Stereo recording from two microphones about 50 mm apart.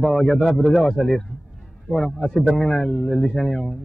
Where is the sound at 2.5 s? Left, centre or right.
Centre.